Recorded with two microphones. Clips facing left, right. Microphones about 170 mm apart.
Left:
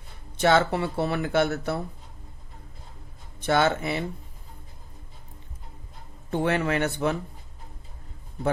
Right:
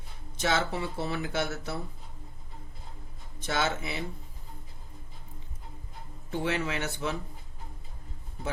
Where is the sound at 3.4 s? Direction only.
60° left (ahead or behind).